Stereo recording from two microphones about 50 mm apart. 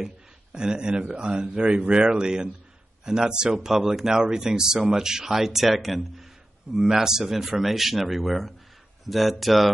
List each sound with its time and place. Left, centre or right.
0.0 s a man's voice: centre